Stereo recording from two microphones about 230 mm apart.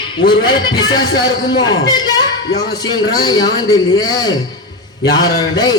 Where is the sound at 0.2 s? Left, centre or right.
Centre.